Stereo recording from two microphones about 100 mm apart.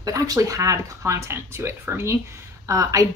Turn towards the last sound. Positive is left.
turn(degrees=-35)  # may be behind; listen again after turning